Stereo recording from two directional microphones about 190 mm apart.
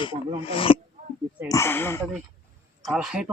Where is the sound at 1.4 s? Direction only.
15° left (ahead or behind).